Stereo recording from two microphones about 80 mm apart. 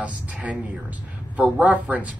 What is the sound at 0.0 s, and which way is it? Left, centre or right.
A woman's voice, centre.